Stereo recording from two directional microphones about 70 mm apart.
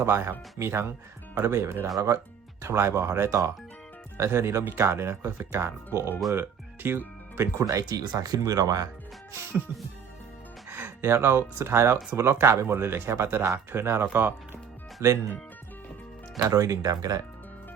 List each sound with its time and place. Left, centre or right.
0.0 s speech: right
7.6 s speech: right
10.7 s music: right
11.0 s speech: right
15.0 s speech: right
16.4 s speech: right